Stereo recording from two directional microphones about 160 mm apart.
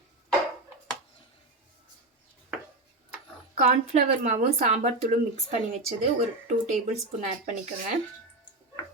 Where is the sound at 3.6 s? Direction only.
50° right (ahead or behind).